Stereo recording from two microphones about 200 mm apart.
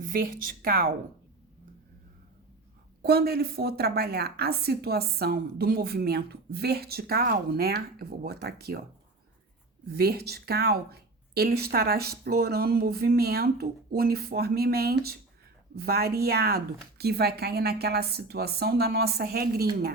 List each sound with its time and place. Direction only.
0.0 s a woman's voice: 45° right (ahead or behind)
3.0 s a woman's voice: 50° right (ahead or behind)
9.9 s a woman's voice: 50° right (ahead or behind)